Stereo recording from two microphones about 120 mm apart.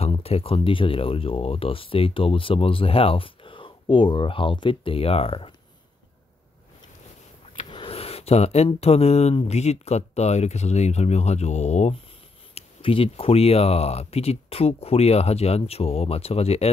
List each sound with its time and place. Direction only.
0.0 s speech: 55° left (ahead or behind)
7.7 s a sound: 50° left (ahead or behind)
8.7 s speech: 60° left (ahead or behind)
12.5 s speech: 50° left (ahead or behind)